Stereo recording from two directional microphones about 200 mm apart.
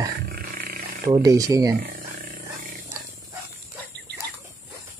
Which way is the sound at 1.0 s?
20° right (ahead or behind).